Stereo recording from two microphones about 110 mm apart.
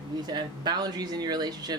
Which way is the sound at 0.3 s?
40° right (ahead or behind).